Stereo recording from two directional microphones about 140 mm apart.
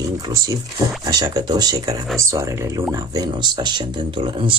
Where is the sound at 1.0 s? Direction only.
25° right (ahead or behind).